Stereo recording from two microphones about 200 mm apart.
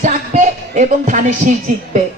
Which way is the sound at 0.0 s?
35° right (ahead or behind).